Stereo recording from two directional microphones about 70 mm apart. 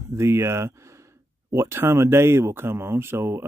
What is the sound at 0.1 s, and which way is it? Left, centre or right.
Speech, right.